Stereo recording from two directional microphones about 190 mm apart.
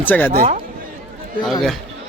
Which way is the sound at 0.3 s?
35° right (ahead or behind).